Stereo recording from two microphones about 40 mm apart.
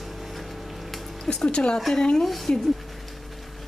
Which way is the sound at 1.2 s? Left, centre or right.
Centre.